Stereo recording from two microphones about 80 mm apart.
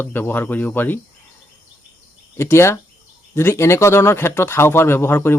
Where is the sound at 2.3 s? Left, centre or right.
Left.